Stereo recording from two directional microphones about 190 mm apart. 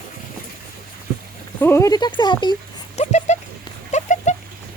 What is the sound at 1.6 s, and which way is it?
Speech, 15° left (ahead or behind).